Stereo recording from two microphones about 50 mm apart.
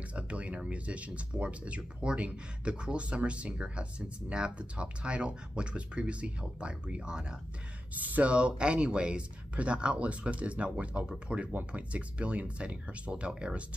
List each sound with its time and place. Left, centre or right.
0.1 s a sound: right
0.6 s speech: right
7.9 s speech: right